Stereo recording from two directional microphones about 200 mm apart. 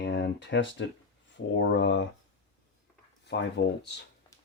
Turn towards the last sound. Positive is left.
turn(degrees=65)  # may be behind; listen again after turning